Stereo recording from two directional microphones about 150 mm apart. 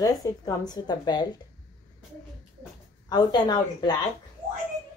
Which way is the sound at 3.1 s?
30° left (ahead or behind).